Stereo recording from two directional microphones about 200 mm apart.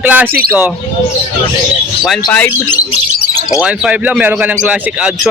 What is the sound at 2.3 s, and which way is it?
Speech, 10° left (ahead or behind).